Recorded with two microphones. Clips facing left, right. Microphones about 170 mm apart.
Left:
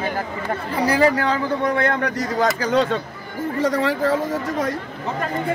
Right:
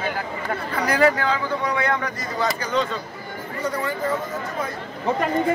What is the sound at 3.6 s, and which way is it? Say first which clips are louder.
Speech: left 5 dB; 90° left.